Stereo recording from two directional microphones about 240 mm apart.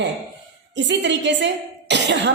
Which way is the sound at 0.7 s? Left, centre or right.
Right.